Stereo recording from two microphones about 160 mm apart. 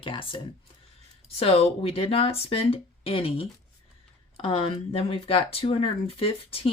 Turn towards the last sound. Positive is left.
turn(degrees=35)  # may be behind; listen again after turning